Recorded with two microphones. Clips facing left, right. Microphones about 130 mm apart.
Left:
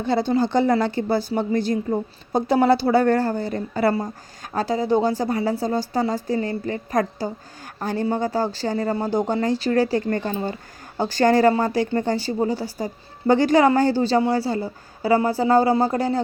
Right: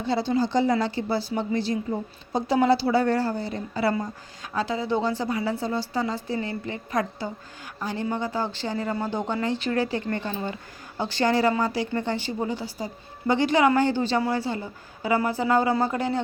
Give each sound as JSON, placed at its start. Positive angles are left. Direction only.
{"t": 0.0, "sound": "a woman's voice", "side_deg": 50}